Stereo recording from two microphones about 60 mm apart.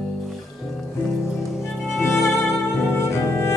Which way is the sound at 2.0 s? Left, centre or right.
Left.